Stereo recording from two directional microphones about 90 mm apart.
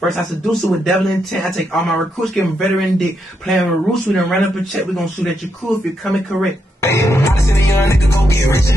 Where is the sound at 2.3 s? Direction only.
Centre (ahead or behind).